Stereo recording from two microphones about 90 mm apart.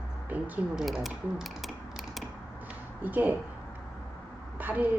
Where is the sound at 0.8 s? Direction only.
Centre (ahead or behind).